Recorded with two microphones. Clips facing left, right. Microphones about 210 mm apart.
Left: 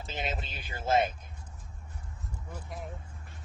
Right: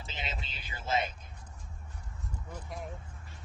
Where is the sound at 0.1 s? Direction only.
50° left (ahead or behind).